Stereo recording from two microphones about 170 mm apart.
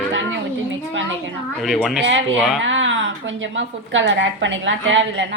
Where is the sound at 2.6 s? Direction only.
90° right.